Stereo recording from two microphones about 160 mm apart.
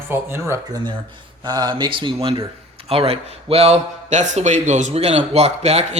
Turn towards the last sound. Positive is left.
turn(degrees=-40)  # may be behind; listen again after turning